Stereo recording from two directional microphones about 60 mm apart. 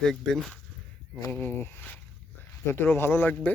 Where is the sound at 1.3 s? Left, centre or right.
Left.